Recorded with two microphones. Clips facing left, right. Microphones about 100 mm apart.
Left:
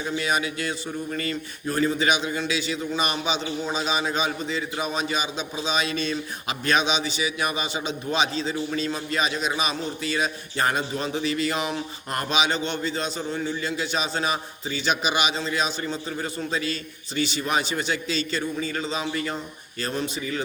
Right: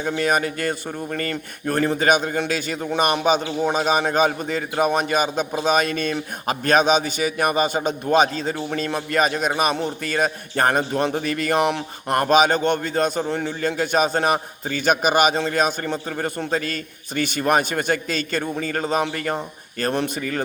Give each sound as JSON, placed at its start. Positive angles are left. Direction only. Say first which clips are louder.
{"t": 0.0, "sound": "a man's voice", "louder": "right 5 dB", "side_deg": -50}